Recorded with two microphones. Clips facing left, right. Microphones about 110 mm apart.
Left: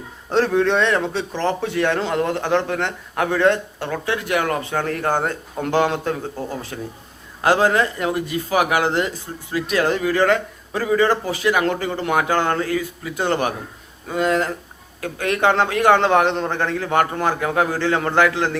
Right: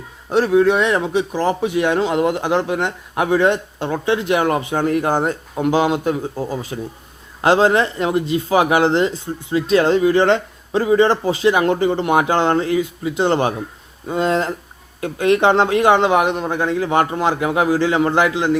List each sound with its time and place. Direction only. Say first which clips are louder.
0.3 s a man's voice: right 4 dB; 10° right (ahead or behind)